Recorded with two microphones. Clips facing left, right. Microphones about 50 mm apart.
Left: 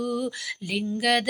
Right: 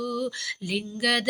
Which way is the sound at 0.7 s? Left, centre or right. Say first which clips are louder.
Left 2 dB; centre.